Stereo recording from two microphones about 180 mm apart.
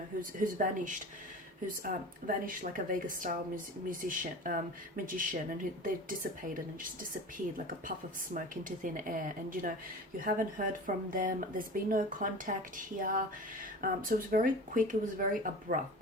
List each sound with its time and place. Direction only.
0.2 s speech: 50° right (ahead or behind)
7.9 s speech: 45° right (ahead or behind)